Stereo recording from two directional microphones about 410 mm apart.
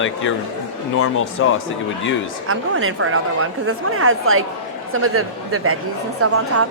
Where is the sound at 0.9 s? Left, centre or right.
Left.